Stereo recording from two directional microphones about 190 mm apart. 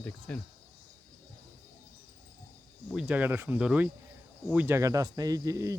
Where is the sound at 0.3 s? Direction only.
5° left (ahead or behind).